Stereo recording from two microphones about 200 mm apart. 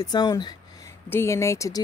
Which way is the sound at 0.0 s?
20° left (ahead or behind).